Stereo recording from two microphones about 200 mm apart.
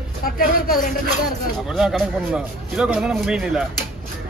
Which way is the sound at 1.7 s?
Centre (ahead or behind).